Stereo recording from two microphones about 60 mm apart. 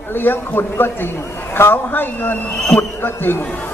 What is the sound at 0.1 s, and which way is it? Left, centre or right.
A man's voice, left.